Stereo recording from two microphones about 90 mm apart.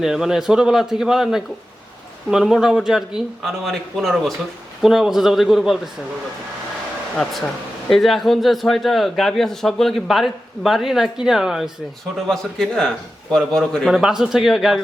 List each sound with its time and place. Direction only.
0.0 s a man's voice: 5° right (ahead or behind)
7.9 s a man's voice: centre (ahead or behind)